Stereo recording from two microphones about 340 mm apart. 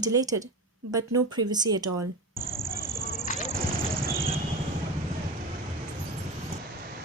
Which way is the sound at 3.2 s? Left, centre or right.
Left.